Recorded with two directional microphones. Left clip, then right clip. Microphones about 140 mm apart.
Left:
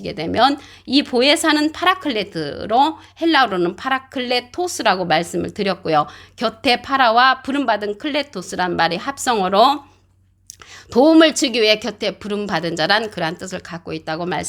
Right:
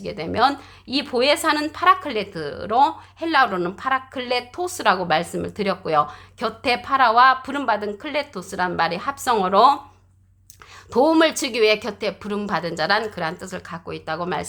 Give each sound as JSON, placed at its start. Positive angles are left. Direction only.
{"t": 0.0, "sound": "a woman's voice", "side_deg": 45}
{"t": 10.9, "sound": "a woman's voice", "side_deg": 35}